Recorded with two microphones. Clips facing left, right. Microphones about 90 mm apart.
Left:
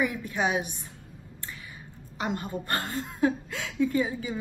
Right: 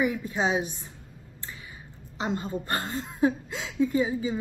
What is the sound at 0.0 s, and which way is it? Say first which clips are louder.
Speech: right 1 dB; 25° right (ahead or behind).